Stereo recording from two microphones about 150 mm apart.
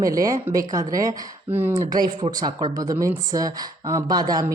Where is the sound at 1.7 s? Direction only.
25° right (ahead or behind).